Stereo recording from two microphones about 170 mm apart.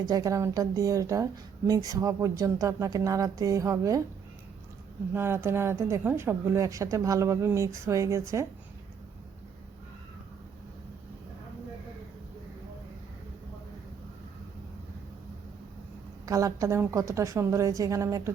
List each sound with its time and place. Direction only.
0.0 s a woman's voice: 20° right (ahead or behind)
5.1 s speech: 15° right (ahead or behind)
16.2 s a woman's voice: 20° right (ahead or behind)